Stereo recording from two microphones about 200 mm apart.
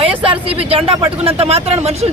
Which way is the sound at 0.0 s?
25° right (ahead or behind).